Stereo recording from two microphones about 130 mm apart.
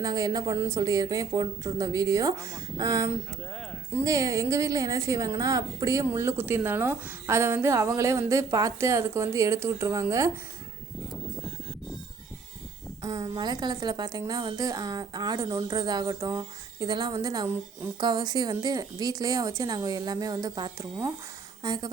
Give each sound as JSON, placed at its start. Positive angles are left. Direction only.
{"t": 0.0, "sound": "a woman's voice", "side_deg": -30}
{"t": 13.0, "sound": "a woman's voice", "side_deg": -25}